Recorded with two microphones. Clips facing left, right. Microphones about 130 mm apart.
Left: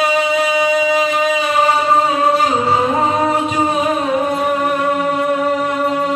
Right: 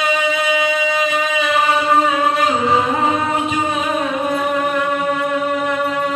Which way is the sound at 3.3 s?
30° left (ahead or behind).